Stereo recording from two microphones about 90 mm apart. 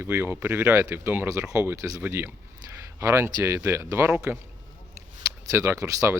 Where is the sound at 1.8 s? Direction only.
40° right (ahead or behind).